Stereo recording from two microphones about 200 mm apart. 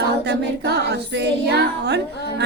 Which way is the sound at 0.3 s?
55° right (ahead or behind).